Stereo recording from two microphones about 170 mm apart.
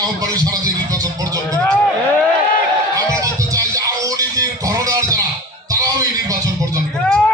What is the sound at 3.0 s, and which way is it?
Music, 20° right (ahead or behind).